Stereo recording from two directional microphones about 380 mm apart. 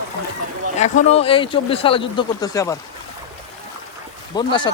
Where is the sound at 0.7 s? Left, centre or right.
Centre.